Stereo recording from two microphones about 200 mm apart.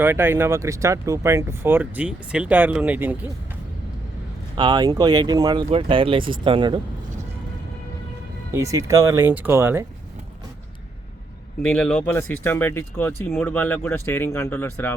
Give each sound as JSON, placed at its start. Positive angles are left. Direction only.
{"t": 0.0, "sound": "speech", "side_deg": -10}
{"t": 4.5, "sound": "speech", "side_deg": -25}
{"t": 8.5, "sound": "speech", "side_deg": -15}
{"t": 11.7, "sound": "speech", "side_deg": 5}